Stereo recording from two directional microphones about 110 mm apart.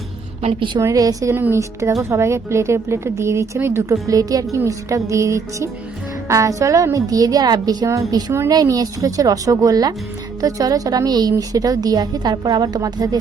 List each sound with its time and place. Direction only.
0.8 s a woman's voice: 30° right (ahead or behind)
7.9 s a woman's voice: 25° right (ahead or behind)